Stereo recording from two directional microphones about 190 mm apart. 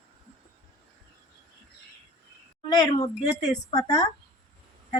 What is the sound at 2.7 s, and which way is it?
A woman's voice, 20° left (ahead or behind).